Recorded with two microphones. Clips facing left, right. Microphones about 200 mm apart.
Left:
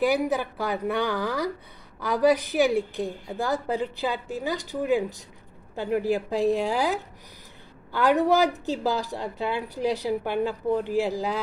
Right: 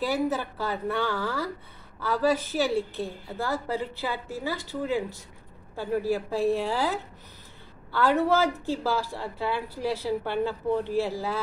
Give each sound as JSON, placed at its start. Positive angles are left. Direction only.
{"t": 0.0, "sound": "a woman's voice", "side_deg": 15}